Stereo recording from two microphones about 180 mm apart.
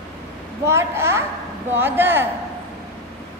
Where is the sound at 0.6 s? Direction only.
15° right (ahead or behind).